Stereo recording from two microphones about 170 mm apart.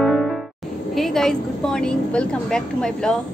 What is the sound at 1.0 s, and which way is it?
A woman's voice, centre (ahead or behind).